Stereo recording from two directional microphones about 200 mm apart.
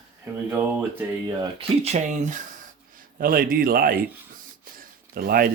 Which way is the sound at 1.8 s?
35° right (ahead or behind).